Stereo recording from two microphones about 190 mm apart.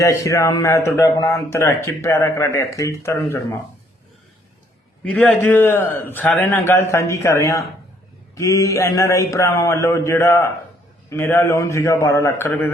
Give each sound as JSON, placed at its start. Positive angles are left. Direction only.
{"t": 0.0, "sound": "speech", "side_deg": 15}
{"t": 5.0, "sound": "speech", "side_deg": 10}